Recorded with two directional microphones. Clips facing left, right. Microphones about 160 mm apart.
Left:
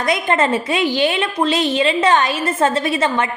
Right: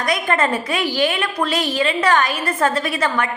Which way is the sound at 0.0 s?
25° left (ahead or behind).